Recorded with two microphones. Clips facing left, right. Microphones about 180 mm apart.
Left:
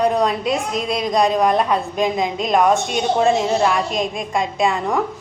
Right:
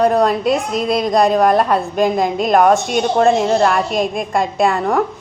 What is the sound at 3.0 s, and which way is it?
A woman's voice, 55° right (ahead or behind).